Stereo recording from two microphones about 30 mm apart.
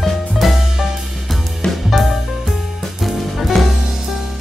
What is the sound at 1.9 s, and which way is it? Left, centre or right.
Music, centre.